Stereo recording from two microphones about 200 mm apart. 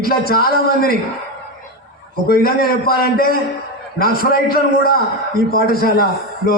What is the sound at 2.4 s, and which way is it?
A man's voice, 50° left (ahead or behind).